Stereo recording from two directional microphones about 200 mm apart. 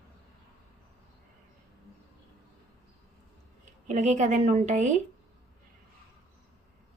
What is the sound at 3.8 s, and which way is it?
A woman's voice, 35° right (ahead or behind).